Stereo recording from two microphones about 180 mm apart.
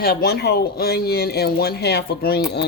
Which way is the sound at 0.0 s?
60° left (ahead or behind).